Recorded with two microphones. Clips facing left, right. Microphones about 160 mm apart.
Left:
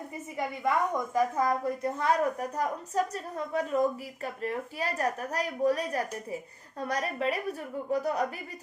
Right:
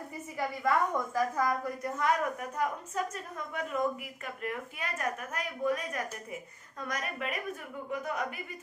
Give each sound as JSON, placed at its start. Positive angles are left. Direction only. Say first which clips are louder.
{"t": 0.3, "sound": "a woman's voice", "louder": "left 1 dB", "side_deg": 20}